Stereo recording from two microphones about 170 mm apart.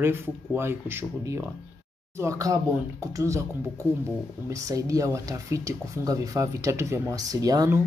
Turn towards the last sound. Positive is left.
turn(degrees=-20)  # may be behind; listen again after turning